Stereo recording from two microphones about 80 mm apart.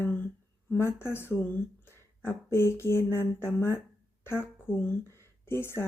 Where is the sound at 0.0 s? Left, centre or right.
Left.